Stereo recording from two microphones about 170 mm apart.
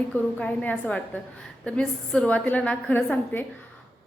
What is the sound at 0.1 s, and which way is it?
A woman's voice, 10° left (ahead or behind).